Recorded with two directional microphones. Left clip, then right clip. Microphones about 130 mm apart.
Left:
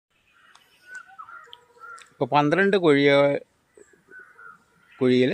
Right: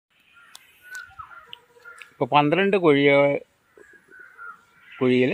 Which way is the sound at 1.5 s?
10° left (ahead or behind).